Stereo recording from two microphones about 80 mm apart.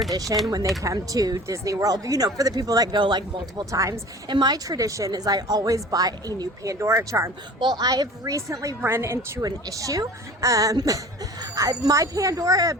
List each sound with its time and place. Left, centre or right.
0.1 s a woman's voice: right
3.0 s speech: right
3.7 s a woman's voice: right
4.3 s speech: right
4.5 s a woman's voice: right
7.6 s a woman's voice: right
8.8 s a woman's voice: right
9.4 s a woman's voice: right